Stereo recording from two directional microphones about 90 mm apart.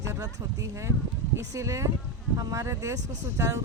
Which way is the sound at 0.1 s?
35° right (ahead or behind).